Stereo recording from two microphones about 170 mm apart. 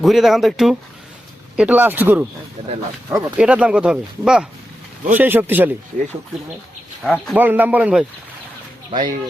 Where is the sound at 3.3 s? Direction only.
5° right (ahead or behind).